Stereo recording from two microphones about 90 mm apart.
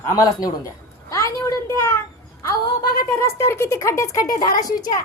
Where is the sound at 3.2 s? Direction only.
30° left (ahead or behind); by 5.0 s 45° left (ahead or behind).